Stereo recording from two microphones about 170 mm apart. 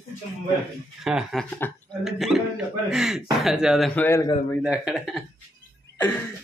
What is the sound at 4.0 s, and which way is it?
Speech, 15° left (ahead or behind).